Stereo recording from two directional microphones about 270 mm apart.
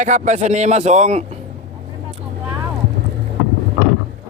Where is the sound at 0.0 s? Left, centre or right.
Right.